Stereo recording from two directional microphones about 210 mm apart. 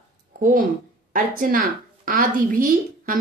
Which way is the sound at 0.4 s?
40° right (ahead or behind).